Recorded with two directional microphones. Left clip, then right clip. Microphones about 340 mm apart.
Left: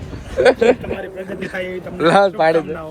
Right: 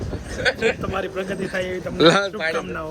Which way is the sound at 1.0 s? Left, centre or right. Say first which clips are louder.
Right 1 dB; centre.